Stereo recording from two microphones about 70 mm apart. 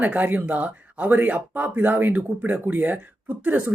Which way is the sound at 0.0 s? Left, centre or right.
Right.